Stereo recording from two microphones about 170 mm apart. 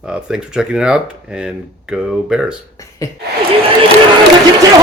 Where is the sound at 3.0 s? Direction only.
20° left (ahead or behind).